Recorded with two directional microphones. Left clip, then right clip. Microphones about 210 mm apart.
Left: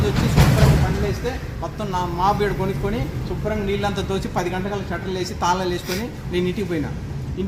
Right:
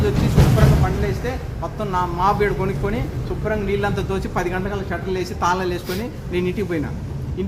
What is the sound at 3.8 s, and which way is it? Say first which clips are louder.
Speech: right 1 dB; 20° left (ahead or behind).